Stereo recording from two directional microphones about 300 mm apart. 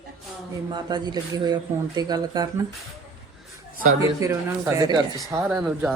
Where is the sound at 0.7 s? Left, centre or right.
Centre.